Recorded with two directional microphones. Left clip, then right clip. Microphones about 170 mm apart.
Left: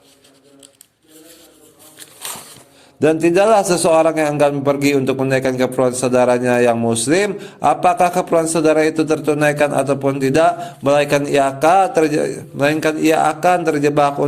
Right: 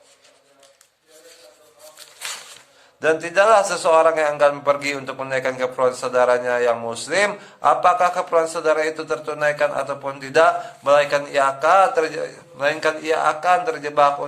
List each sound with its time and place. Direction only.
3.0 s a man's voice: 20° left (ahead or behind)